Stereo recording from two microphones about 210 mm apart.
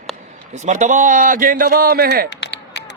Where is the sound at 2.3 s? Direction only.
55° left (ahead or behind).